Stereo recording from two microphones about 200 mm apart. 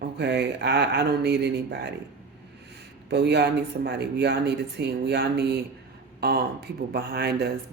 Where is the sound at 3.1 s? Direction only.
55° right (ahead or behind).